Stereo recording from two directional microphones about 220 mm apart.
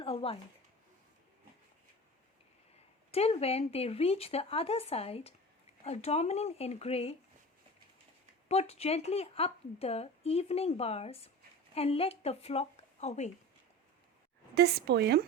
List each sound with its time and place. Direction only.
0.0 s speech: 25° left (ahead or behind)
3.1 s a woman's voice: 30° left (ahead or behind)
8.4 s a woman's voice: 30° left (ahead or behind)
14.5 s speech: 45° right (ahead or behind)